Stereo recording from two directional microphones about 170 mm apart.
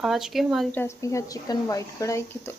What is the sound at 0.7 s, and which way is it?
Speech, 15° left (ahead or behind).